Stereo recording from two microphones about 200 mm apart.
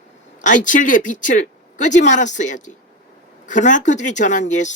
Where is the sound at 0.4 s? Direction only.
40° left (ahead or behind).